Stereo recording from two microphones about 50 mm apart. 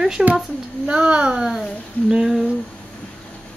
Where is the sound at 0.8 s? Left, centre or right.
Right.